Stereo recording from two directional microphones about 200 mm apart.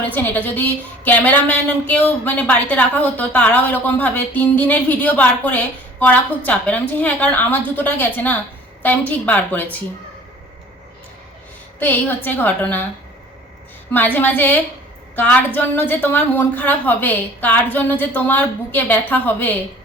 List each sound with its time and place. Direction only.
0.1 s a woman's voice: 10° left (ahead or behind)
11.8 s a woman's voice: 10° left (ahead or behind)
13.9 s a woman's voice: 10° left (ahead or behind)